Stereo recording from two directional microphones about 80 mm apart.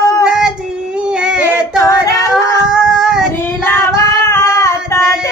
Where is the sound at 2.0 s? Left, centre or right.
Left.